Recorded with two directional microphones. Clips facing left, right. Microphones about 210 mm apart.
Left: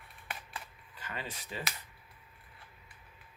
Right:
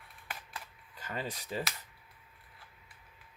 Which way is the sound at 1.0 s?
40° right (ahead or behind).